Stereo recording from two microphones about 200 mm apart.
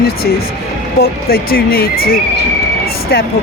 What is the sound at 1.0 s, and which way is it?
Speech, 50° left (ahead or behind).